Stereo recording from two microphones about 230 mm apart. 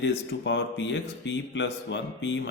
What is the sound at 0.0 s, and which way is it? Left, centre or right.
Speech, left.